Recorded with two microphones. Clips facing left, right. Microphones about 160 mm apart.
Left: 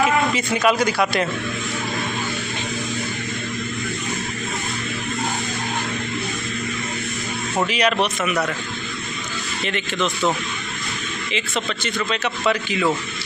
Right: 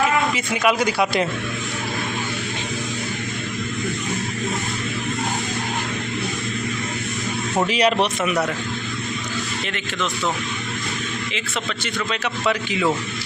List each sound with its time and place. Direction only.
0.3 s a man's voice: 10° right (ahead or behind)
0.8 s speech: 20° right (ahead or behind)
7.7 s speech: 30° right (ahead or behind)
12.1 s a man's voice: 10° right (ahead or behind)